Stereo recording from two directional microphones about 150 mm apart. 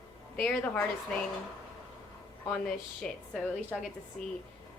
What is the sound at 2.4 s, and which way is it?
A woman's voice, 5° left (ahead or behind).